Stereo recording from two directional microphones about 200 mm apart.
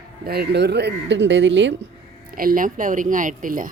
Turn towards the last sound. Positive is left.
turn(degrees=-40)  # may be behind; listen again after turning